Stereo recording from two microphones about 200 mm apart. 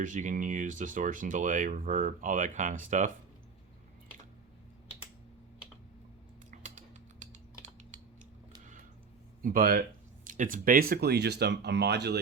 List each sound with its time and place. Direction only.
0.0 s speech: 40° right (ahead or behind)
6.5 s typing: 35° right (ahead or behind)
9.4 s speech: 45° right (ahead or behind)